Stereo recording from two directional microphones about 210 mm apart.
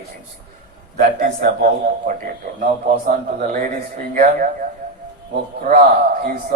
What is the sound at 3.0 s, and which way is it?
A man's voice, 40° right (ahead or behind).